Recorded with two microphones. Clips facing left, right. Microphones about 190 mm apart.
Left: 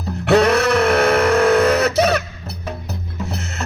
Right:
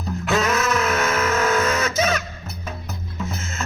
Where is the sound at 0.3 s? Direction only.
70° left (ahead or behind).